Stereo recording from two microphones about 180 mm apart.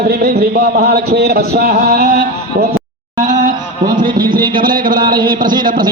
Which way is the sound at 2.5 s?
70° right (ahead or behind).